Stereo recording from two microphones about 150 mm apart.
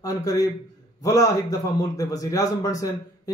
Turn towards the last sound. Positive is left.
turn(degrees=20)  # may be behind; listen again after turning